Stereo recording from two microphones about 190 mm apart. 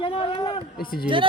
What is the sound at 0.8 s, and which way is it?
Speech, 50° left (ahead or behind).